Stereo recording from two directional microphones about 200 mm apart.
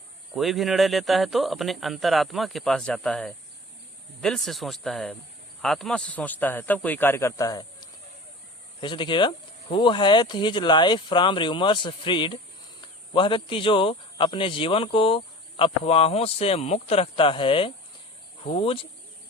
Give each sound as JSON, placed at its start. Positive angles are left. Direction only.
{"t": 0.3, "sound": "speech", "side_deg": 0}